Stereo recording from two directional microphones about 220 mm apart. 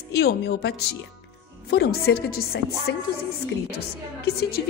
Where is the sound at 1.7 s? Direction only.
45° left (ahead or behind).